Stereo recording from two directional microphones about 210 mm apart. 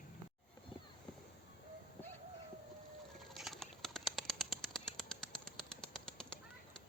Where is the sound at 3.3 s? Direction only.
Centre (ahead or behind).